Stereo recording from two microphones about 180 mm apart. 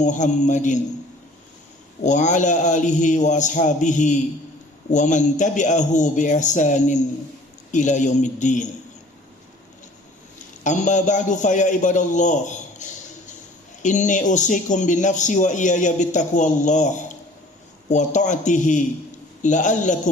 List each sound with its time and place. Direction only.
0.0 s speech: 40° left (ahead or behind)
2.0 s speech: 40° left (ahead or behind)
10.3 s a man's voice: 45° left (ahead or behind)